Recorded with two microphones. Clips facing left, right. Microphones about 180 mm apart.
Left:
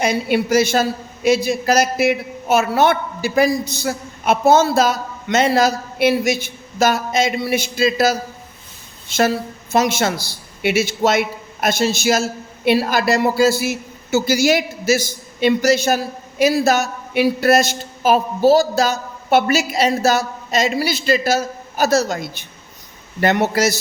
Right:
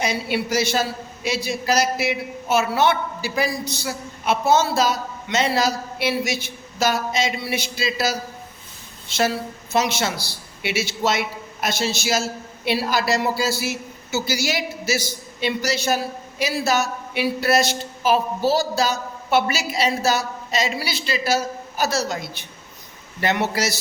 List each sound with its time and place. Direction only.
0.0 s a man's voice: 50° left (ahead or behind)